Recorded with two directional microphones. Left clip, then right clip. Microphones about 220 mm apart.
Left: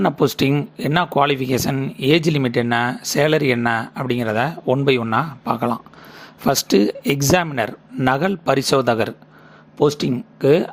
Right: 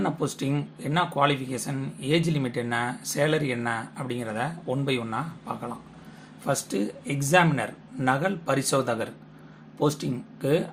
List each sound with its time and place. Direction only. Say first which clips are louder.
0.0 s speech: left 11 dB; 40° left (ahead or behind)